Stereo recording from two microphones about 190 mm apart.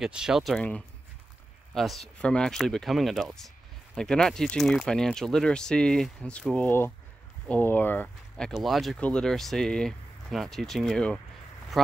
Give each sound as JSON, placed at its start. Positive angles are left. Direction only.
{"t": 0.0, "sound": "speech", "side_deg": -5}